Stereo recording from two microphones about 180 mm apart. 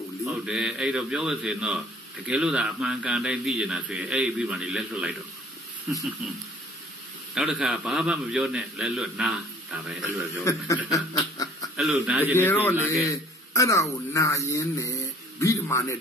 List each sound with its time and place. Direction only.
0.2 s a man's voice: 5° right (ahead or behind)
7.3 s a man's voice: 5° right (ahead or behind)
10.9 s snicker: 20° left (ahead or behind)
11.7 s a man's voice: 5° right (ahead or behind)
12.4 s a man's voice: 10° left (ahead or behind)